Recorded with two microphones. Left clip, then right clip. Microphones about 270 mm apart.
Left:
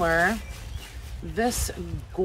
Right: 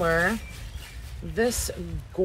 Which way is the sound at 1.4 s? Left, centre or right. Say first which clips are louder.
Right 1 dB; centre.